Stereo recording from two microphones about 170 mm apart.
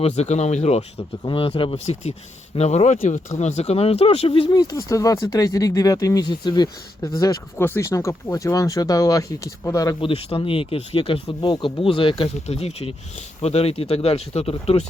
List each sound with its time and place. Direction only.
0.0 s speech: 40° left (ahead or behind)
4.4 s speech: 25° left (ahead or behind)
10.0 s speech: 35° left (ahead or behind)